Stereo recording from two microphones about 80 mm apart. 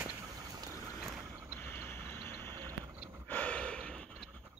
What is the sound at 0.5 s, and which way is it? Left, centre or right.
Boat, right.